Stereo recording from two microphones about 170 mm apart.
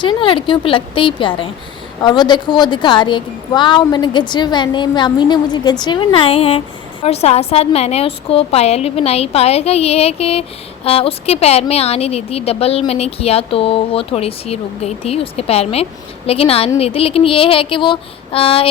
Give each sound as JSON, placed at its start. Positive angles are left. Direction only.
{"t": 0.0, "sound": "a woman's voice", "side_deg": 30}